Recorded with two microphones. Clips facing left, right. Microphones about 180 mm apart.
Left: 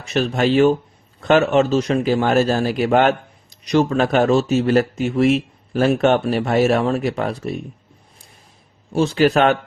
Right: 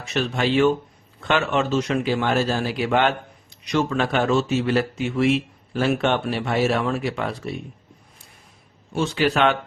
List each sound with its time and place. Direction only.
0.1 s speech: 40° left (ahead or behind)
8.9 s speech: 40° left (ahead or behind)